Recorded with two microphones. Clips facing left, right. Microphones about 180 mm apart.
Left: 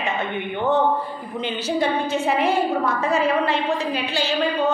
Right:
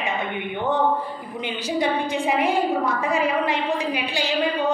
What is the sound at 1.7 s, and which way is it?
A woman's voice, 15° right (ahead or behind).